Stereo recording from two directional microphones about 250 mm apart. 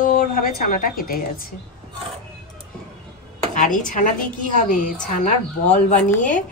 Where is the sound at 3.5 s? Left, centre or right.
Left.